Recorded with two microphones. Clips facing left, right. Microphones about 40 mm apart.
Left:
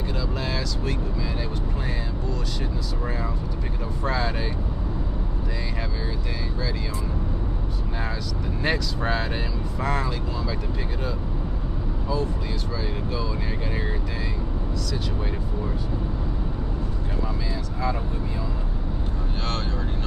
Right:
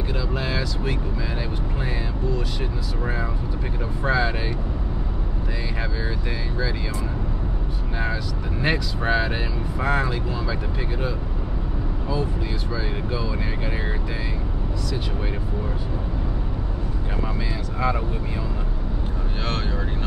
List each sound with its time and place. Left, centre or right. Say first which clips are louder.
0.4 s vehicle: right 2 dB; centre
4.0 s speech: right 4 dB; centre
8.6 s speech: right 2 dB; centre